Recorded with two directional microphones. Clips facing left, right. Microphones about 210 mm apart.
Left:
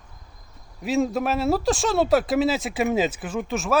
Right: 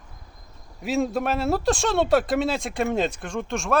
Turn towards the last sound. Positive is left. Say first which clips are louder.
# left 1 dB
turn(degrees=5)  # may be behind; listen again after turning